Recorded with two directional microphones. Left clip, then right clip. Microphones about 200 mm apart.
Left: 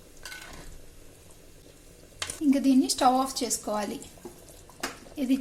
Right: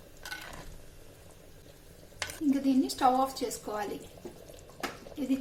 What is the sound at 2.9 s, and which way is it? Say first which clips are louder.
Speech: left 3 dB; 40° left (ahead or behind).